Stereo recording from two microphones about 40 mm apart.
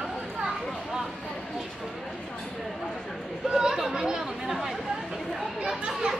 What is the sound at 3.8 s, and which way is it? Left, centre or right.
Chatter, centre.